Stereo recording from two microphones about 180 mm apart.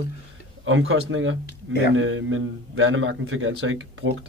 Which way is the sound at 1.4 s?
65° left (ahead or behind).